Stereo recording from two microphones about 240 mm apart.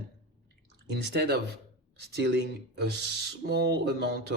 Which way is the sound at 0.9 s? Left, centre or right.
Right.